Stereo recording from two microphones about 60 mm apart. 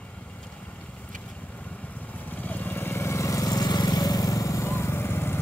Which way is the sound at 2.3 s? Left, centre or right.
Left.